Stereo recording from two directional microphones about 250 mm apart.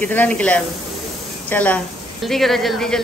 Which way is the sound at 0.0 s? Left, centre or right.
Centre.